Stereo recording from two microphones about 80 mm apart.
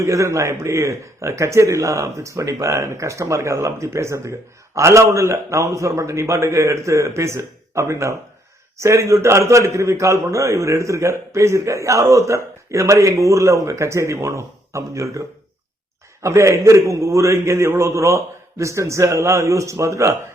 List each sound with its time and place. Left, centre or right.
0.0 s a man's voice: right
16.2 s a man's voice: right